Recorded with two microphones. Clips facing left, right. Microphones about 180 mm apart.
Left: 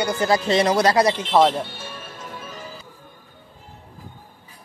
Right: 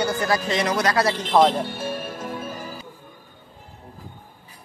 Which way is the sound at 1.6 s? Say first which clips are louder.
Right 8 dB; 60° right (ahead or behind).